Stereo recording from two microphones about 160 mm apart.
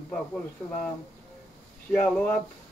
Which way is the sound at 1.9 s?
5° left (ahead or behind).